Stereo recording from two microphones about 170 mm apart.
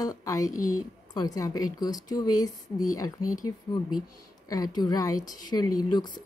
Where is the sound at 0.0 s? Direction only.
20° left (ahead or behind).